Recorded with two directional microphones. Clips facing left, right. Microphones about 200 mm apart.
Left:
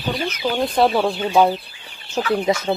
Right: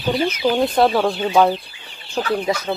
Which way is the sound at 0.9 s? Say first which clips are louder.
Right 1 dB; 10° left (ahead or behind).